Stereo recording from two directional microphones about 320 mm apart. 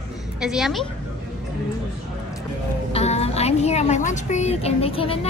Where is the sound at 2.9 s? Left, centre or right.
Centre.